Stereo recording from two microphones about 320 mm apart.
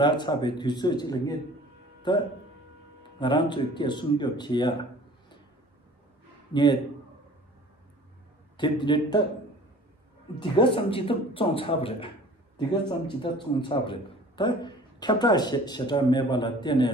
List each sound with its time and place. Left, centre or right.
0.0 s a man's voice: centre
3.2 s a man's voice: centre
6.5 s a man's voice: centre
8.5 s a man's voice: centre
10.4 s a man's voice: centre